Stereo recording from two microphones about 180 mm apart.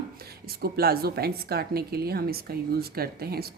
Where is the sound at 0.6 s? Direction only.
60° right (ahead or behind).